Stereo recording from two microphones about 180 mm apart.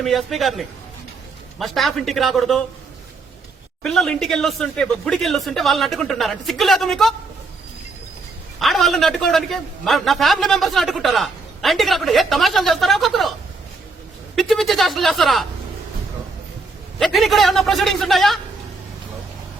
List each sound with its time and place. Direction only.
0.0 s a man's voice: centre (ahead or behind)
3.8 s a man's voice: centre (ahead or behind)
8.5 s a man's voice: centre (ahead or behind)
14.3 s a man's voice: centre (ahead or behind)
17.0 s a man's voice: centre (ahead or behind)